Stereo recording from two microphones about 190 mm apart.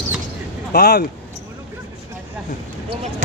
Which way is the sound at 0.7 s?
55° left (ahead or behind).